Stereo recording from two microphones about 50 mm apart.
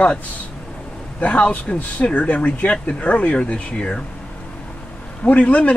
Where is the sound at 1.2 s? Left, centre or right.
Left.